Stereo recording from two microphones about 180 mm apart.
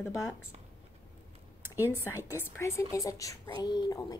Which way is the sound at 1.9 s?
15° left (ahead or behind).